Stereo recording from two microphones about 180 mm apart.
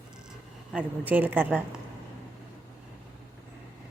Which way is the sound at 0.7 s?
10° right (ahead or behind).